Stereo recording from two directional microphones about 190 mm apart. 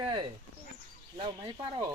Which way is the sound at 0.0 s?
25° right (ahead or behind).